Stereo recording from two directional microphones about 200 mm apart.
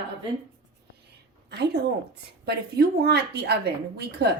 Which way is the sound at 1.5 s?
55° right (ahead or behind).